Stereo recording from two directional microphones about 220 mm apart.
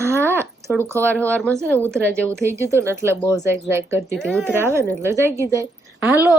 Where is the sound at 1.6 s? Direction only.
10° right (ahead or behind).